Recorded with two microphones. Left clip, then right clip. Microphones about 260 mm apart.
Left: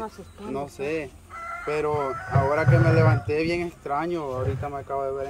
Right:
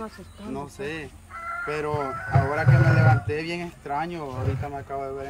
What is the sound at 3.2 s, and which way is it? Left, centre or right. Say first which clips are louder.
Speech: left 4 dB; centre.